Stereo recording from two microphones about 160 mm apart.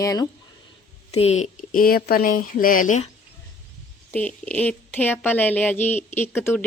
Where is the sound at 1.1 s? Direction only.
40° left (ahead or behind).